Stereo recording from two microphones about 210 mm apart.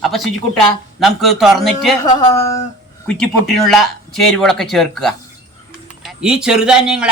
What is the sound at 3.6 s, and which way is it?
A man's voice, centre (ahead or behind).